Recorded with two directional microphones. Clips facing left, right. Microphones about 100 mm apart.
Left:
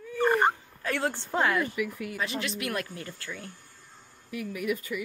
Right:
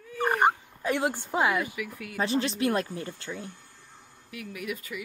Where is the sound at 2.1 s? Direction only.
30° right (ahead or behind).